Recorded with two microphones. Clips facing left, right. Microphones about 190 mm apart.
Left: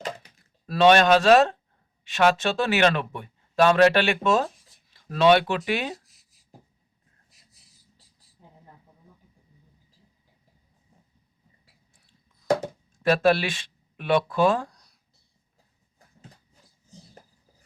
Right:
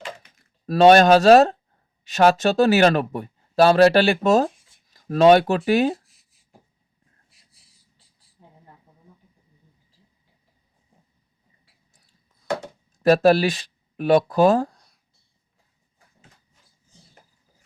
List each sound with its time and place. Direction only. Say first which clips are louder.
0.7 s speech: right 5 dB; 40° right (ahead or behind)
13.0 s speech: right 5 dB; 40° right (ahead or behind)